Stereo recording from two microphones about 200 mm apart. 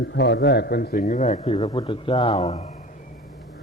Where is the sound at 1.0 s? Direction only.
35° left (ahead or behind).